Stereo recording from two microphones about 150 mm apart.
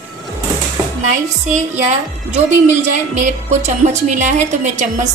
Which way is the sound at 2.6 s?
50° right (ahead or behind).